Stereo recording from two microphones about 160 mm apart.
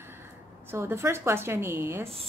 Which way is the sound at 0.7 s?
15° right (ahead or behind).